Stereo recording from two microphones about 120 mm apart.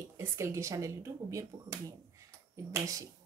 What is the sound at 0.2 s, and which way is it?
Speech, 20° right (ahead or behind).